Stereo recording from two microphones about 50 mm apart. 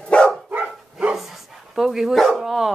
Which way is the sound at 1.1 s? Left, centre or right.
Centre.